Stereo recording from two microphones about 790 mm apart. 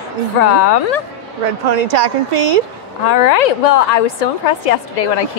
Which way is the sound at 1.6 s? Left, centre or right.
Right.